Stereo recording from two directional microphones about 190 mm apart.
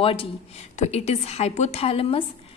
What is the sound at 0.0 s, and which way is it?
A woman's voice, 30° left (ahead or behind).